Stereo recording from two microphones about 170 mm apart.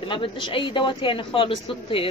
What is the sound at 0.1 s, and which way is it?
Speech, 30° left (ahead or behind).